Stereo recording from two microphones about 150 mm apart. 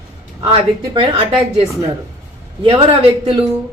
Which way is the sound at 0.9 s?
35° right (ahead or behind).